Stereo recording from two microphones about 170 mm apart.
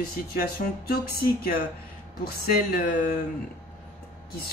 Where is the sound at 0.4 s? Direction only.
65° left (ahead or behind).